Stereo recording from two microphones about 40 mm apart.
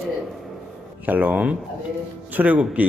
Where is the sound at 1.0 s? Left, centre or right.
Right.